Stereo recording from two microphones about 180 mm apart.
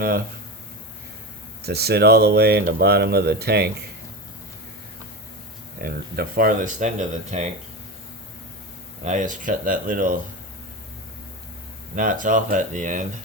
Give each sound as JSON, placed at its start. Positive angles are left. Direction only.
{"t": 1.6, "sound": "speech", "side_deg": -60}
{"t": 5.8, "sound": "speech", "side_deg": -55}
{"t": 9.0, "sound": "speech", "side_deg": -45}
{"t": 11.9, "sound": "speech", "side_deg": -50}